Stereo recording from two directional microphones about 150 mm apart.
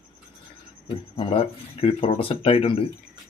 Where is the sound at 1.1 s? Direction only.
40° left (ahead or behind).